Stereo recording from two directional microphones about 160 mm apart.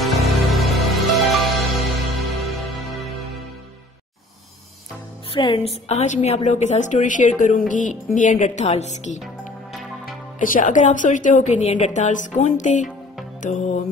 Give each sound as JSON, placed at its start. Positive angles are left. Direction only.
{"t": 0.0, "sound": "music", "side_deg": 0}
{"t": 5.3, "sound": "a woman's voice", "side_deg": 35}